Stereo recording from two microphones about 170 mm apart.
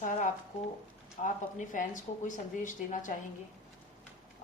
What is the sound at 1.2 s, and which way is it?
A woman's voice, 50° left (ahead or behind).